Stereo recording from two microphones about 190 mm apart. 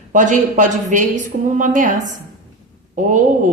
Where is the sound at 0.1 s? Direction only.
40° right (ahead or behind).